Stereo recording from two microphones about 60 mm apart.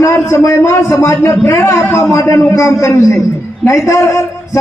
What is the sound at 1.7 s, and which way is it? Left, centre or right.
A man's voice, left.